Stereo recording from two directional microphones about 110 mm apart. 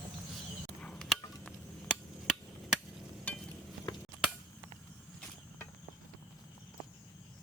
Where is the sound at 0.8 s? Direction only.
5° left (ahead or behind).